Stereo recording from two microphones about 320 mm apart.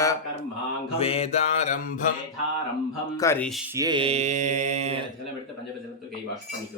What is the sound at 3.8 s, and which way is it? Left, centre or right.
Mantra, centre.